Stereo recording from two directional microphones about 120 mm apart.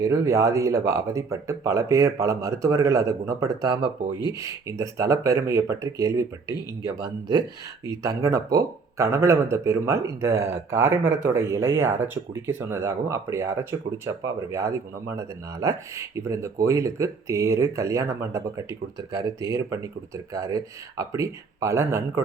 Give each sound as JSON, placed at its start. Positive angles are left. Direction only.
{"t": 0.0, "sound": "speech", "side_deg": -25}
{"t": 7.0, "sound": "speech", "side_deg": -35}